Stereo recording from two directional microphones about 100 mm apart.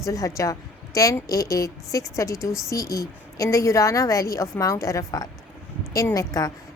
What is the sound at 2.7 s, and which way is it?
A woman's voice, 35° left (ahead or behind).